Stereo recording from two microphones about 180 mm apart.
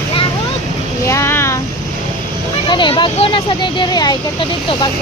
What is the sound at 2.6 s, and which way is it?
Speech, 25° left (ahead or behind).